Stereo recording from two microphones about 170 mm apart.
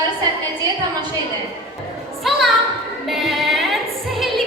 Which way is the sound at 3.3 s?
Centre (ahead or behind).